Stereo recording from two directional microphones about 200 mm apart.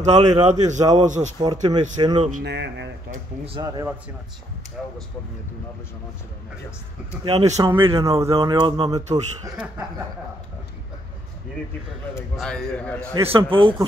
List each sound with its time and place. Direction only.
0.0 s speech: 35° right (ahead or behind)
0.7 s speech: 20° right (ahead or behind)
1.0 s speech: 40° right (ahead or behind)
1.4 s speech: 20° right (ahead or behind)
2.4 s speech: 60° right (ahead or behind)
3.1 s speech: 25° right (ahead or behind)
4.8 s a man's voice: 5° right (ahead or behind)
7.2 s speech: 30° right (ahead or behind)
7.5 s speech: 15° right (ahead or behind)
12.4 s a man's voice: 5° left (ahead or behind)
13.1 s speech: 25° right (ahead or behind)